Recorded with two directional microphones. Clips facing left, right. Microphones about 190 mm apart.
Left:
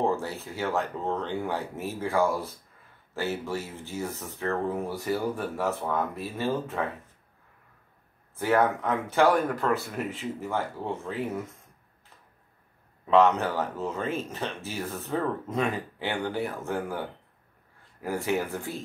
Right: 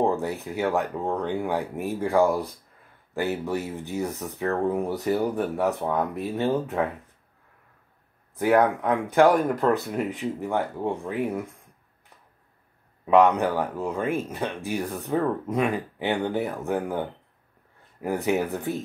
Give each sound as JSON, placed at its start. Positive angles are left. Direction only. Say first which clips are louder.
{"t": 0.0, "sound": "speech", "louder": "right 3 dB", "side_deg": -15}
{"t": 8.4, "sound": "speech", "louder": "right 4 dB", "side_deg": -15}
{"t": 13.1, "sound": "speech", "louder": "right 3 dB", "side_deg": -15}
{"t": 18.0, "sound": "speech", "louder": "right 4 dB", "side_deg": -20}